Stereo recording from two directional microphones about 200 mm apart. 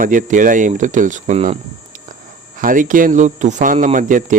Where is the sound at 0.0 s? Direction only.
40° right (ahead or behind).